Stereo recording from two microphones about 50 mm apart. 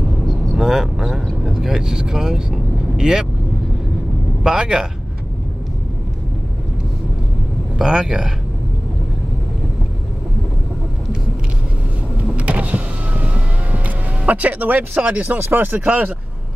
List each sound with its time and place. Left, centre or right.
0.3 s a sound: centre
1.4 s vehicle: centre
4.4 s speech: centre
7.7 s speech: centre
12.4 s power windows: right
15.1 s speech: right